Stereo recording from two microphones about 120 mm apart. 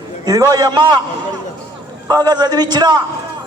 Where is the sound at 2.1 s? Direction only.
35° right (ahead or behind).